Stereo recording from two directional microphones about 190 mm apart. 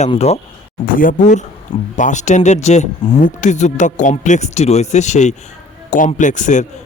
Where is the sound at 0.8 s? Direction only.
45° left (ahead or behind).